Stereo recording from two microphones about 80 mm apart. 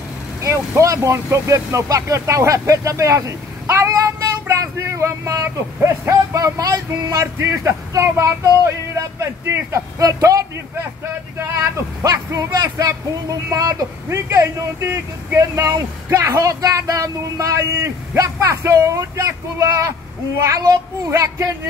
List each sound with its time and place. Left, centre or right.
0.4 s a man's voice: right
12.0 s speech: right
14.0 s speech: right